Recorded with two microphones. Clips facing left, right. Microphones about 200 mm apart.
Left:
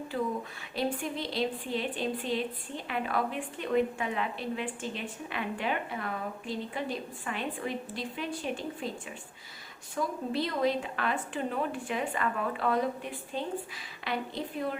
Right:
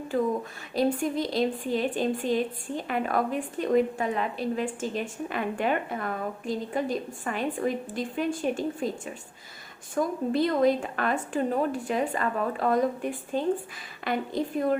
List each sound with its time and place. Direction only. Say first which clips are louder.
0.1 s a woman's voice: right 7 dB; 45° right (ahead or behind)
9.9 s a woman's voice: right 6 dB; 50° right (ahead or behind)